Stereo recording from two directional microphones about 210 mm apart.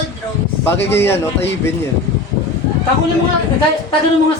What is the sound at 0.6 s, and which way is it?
Speech, 10° left (ahead or behind).